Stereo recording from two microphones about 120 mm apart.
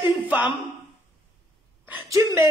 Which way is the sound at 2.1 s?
25° right (ahead or behind).